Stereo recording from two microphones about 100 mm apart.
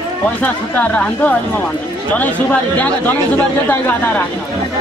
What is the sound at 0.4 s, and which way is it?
Speech, 15° left (ahead or behind).